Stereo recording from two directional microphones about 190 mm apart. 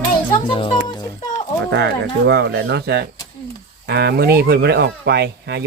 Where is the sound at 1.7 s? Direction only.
65° right (ahead or behind).